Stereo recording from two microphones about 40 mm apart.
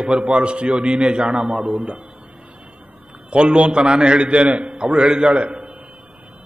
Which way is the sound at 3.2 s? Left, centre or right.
Right.